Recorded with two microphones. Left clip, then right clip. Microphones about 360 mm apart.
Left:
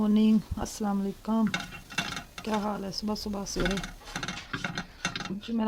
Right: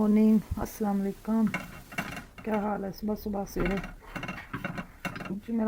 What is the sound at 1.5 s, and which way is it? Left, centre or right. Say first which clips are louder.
Stir: left 1 dB; left.